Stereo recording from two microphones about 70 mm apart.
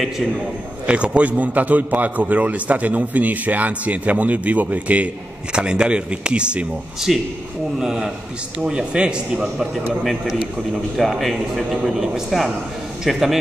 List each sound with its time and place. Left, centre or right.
0.8 s a man's voice: centre
11.0 s a man's voice: centre